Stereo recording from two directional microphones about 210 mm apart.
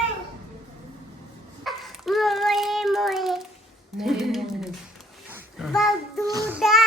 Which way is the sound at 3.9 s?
Centre (ahead or behind).